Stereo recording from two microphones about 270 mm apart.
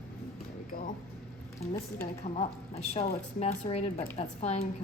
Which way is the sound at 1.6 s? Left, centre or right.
Left.